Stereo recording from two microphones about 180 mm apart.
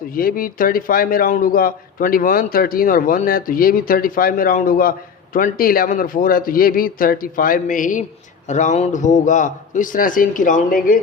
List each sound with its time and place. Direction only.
0.1 s a man's voice: 50° left (ahead or behind)